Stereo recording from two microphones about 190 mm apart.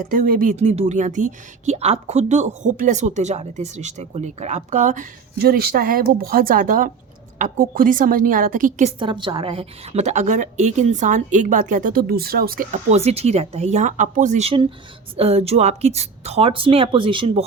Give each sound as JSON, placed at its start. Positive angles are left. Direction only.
{"t": 0.1, "sound": "a woman's voice", "side_deg": -45}
{"t": 9.0, "sound": "speech", "side_deg": -25}